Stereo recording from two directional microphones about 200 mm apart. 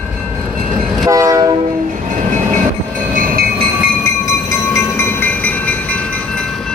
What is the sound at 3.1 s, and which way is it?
Train, 45° right (ahead or behind).